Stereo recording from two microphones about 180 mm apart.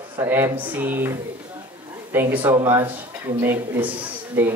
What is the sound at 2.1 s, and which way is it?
Speech, 10° right (ahead or behind).